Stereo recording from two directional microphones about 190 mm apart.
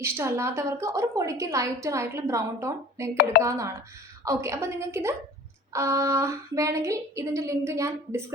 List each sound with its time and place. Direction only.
0.0 s a woman's voice: 15° right (ahead or behind)